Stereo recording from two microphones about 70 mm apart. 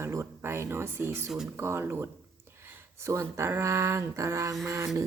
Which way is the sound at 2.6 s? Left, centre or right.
Right.